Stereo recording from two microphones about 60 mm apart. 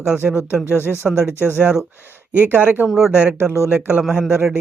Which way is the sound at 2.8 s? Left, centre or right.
Centre.